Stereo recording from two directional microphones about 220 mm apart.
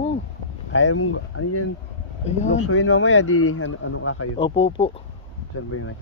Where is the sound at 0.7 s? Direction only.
75° left (ahead or behind).